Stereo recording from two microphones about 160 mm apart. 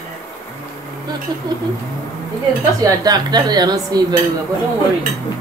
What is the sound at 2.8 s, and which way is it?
Speech, 25° right (ahead or behind).